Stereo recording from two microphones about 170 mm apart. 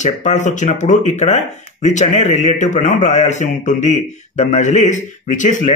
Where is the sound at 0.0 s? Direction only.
45° left (ahead or behind).